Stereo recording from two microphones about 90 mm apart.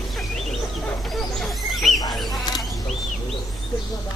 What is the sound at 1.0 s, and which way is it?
Bird, 5° left (ahead or behind).